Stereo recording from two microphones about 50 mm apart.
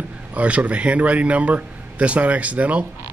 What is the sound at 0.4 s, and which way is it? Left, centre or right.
A man's voice, right.